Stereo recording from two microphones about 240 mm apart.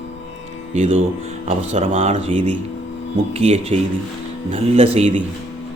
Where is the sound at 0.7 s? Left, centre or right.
Right.